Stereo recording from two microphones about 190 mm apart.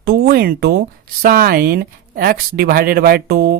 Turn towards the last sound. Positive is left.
turn(degrees=-55)  # may be behind; listen again after turning